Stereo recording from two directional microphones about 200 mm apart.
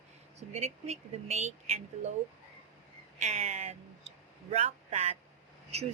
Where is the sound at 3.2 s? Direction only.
35° right (ahead or behind).